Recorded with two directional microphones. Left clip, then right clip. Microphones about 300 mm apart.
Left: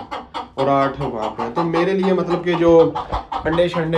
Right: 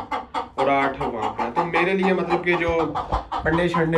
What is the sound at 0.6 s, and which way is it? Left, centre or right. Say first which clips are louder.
Speech: left 3 dB; centre.